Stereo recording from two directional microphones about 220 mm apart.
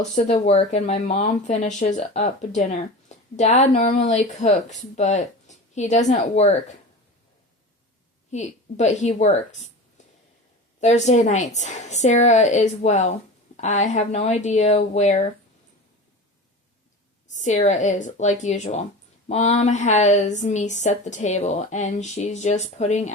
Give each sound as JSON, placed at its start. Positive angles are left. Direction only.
{"t": 0.0, "sound": "speech", "side_deg": 30}
{"t": 8.3, "sound": "speech", "side_deg": 30}
{"t": 10.8, "sound": "speech", "side_deg": 30}
{"t": 17.3, "sound": "speech", "side_deg": 35}